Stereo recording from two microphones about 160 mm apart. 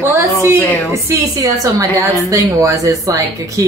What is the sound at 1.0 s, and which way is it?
Speech, 20° right (ahead or behind).